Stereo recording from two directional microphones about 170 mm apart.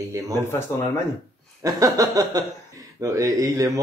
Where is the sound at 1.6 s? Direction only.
20° right (ahead or behind).